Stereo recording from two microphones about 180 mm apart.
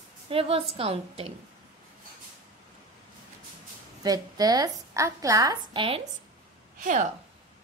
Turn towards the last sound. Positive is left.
turn(degrees=-45)  # may be behind; listen again after turning